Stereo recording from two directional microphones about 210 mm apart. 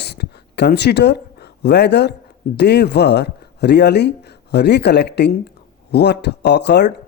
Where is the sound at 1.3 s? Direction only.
50° left (ahead or behind).